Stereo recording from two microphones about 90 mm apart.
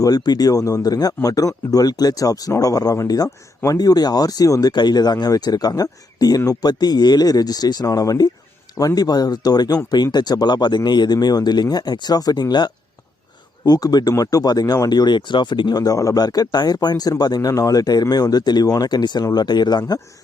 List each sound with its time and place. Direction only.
0.0 s speech: 45° left (ahead or behind)
15.8 s speech: 40° left (ahead or behind)